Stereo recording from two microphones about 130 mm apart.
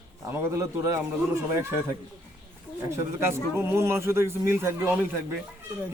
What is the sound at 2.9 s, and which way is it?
A man's voice, 20° right (ahead or behind).